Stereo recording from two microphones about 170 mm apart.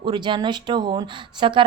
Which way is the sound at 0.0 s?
30° right (ahead or behind).